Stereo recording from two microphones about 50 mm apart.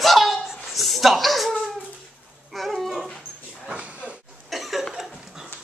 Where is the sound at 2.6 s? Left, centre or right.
Centre.